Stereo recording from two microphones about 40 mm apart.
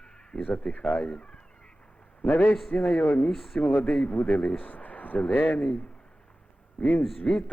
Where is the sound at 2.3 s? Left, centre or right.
Left.